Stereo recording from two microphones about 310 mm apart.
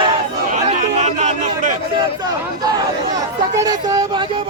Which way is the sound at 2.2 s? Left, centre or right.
Centre.